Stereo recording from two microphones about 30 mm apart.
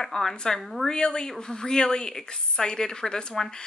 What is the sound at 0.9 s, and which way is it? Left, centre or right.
A woman's voice, left.